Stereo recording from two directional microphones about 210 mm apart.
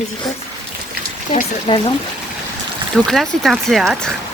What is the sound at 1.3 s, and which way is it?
Speech, 25° left (ahead or behind).